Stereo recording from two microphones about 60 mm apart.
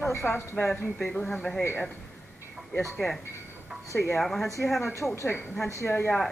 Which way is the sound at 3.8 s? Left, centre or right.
Left.